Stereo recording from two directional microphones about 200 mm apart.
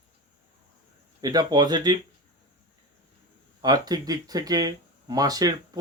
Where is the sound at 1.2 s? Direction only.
20° right (ahead or behind).